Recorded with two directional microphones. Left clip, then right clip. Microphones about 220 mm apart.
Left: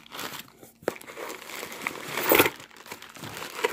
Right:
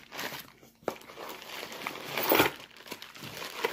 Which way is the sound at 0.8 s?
30° left (ahead or behind).